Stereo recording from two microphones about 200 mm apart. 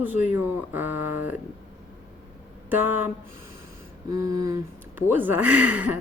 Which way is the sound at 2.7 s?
10° right (ahead or behind).